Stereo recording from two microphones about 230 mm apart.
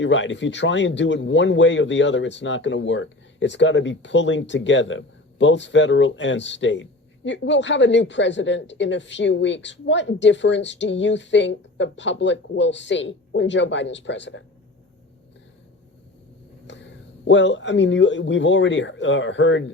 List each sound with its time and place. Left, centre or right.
0.0 s a woman's voice: left
16.6 s speech: left